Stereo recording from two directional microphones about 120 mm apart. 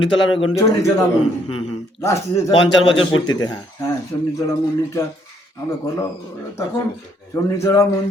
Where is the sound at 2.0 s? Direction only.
25° left (ahead or behind).